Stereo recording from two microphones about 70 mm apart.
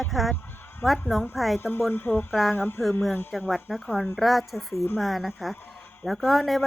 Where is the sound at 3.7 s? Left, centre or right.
Centre.